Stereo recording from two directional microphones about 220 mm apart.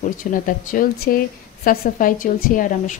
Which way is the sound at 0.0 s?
35° left (ahead or behind).